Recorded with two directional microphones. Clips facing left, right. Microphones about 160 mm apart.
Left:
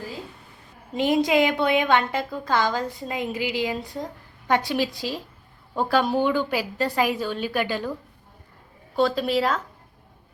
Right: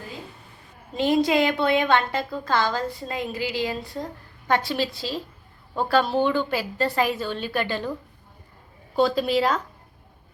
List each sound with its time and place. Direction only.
0.9 s a woman's voice: 15° left (ahead or behind)
9.0 s a woman's voice: centre (ahead or behind)